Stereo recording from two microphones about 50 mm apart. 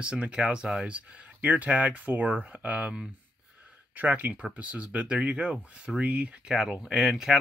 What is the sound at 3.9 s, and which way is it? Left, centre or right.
Speech, right.